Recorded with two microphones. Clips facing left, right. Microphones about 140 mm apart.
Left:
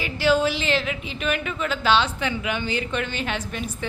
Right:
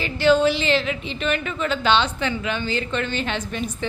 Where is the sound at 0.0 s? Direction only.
5° left (ahead or behind).